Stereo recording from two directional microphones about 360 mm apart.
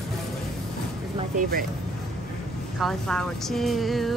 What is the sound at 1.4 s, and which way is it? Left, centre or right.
Speech, right.